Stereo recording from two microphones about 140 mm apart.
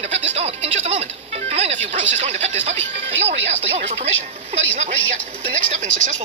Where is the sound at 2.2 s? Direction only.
50° right (ahead or behind).